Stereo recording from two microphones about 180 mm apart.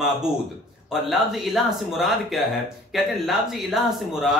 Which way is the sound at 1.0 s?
Centre (ahead or behind).